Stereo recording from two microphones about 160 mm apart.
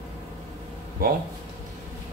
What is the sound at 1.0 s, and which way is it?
Speech, 70° right (ahead or behind).